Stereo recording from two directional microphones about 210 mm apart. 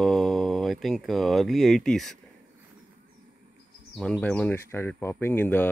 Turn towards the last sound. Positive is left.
turn(degrees=10)  # may be behind; listen again after turning